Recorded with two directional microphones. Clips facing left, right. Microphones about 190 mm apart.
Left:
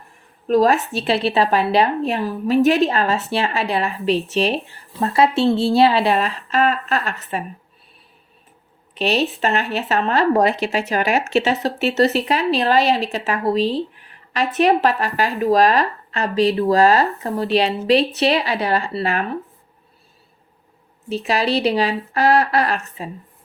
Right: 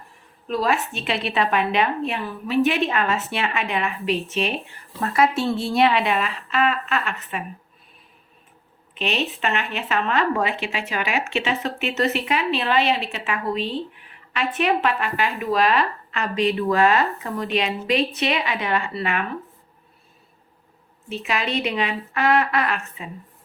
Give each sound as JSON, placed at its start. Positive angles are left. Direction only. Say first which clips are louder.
{"t": 0.4, "sound": "a woman's voice", "louder": "left 7 dB", "side_deg": 45}
{"t": 9.0, "sound": "a woman's voice", "louder": "left 6 dB", "side_deg": 35}
{"t": 21.1, "sound": "a woman's voice", "louder": "left 6 dB", "side_deg": 35}